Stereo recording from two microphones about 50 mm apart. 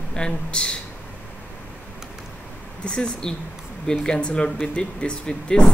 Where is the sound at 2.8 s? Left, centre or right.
Centre.